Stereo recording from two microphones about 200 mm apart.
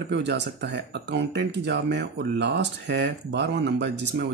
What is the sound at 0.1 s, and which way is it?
Speech, 60° right (ahead or behind).